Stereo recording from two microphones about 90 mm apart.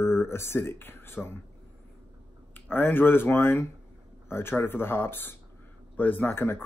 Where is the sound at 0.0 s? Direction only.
30° left (ahead or behind).